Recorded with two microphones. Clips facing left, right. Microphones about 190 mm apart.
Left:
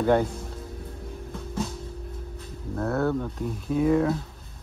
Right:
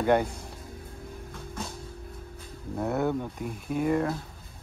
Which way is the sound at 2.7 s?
15° right (ahead or behind).